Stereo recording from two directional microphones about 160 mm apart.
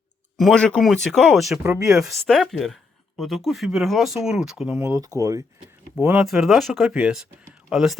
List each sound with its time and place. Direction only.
0.3 s speech: 5° left (ahead or behind)
4.9 s speech: 20° right (ahead or behind)
6.2 s speech: centre (ahead or behind)